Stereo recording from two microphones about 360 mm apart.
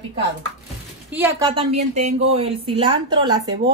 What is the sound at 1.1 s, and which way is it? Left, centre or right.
A woman's voice, centre.